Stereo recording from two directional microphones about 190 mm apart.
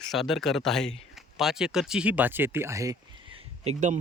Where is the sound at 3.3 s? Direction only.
35° right (ahead or behind).